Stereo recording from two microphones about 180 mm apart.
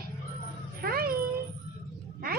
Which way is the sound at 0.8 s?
55° right (ahead or behind).